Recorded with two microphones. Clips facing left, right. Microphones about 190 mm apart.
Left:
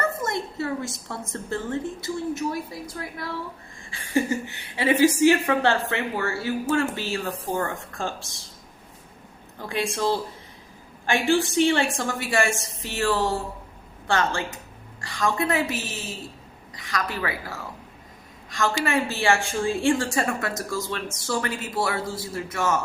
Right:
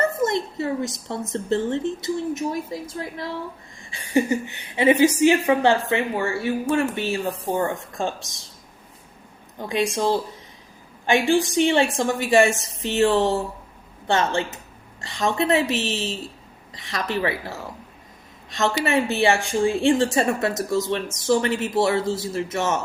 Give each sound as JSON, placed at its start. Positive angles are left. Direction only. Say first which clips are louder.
{"t": 0.0, "sound": "a woman's voice", "louder": "right 5 dB", "side_deg": -20}
{"t": 9.6, "sound": "a woman's voice", "louder": "right 4 dB", "side_deg": -15}